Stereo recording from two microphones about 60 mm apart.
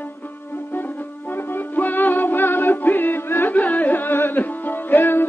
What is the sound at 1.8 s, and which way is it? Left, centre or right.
Music, left.